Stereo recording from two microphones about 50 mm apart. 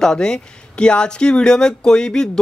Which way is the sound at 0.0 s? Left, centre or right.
Centre.